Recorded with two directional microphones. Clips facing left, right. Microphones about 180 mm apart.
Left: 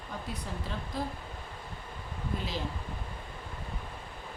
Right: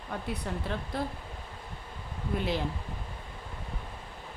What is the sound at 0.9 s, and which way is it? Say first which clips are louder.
Speech: right 1 dB; 60° right (ahead or behind).